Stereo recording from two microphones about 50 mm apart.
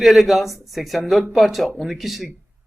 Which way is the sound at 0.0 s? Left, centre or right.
Centre.